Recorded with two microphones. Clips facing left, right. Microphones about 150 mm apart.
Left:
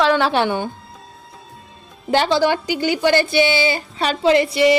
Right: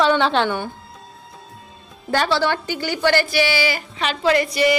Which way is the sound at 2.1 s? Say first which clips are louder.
Left 3 dB; 20° left (ahead or behind).